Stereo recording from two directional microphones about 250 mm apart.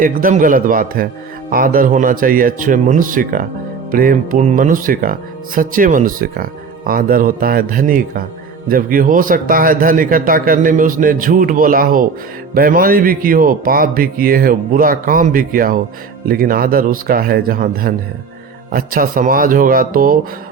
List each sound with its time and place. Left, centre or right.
0.0 s speech: right